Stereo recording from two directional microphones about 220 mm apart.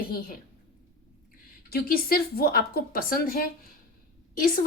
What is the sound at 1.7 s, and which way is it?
A woman's voice, 45° left (ahead or behind).